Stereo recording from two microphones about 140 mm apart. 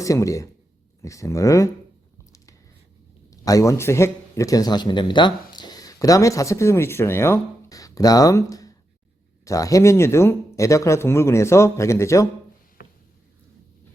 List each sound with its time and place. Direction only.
0.0 s speech: 25° left (ahead or behind)
3.2 s speech: 25° left (ahead or behind)